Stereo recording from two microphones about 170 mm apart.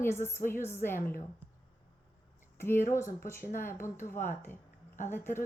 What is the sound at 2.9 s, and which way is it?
A woman's voice, 15° left (ahead or behind).